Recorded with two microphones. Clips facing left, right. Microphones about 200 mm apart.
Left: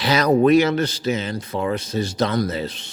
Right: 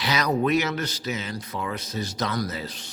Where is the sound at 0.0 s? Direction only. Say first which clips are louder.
Left 8 dB; 30° left (ahead or behind).